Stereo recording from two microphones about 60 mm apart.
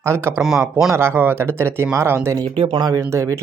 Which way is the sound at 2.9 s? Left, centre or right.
Right.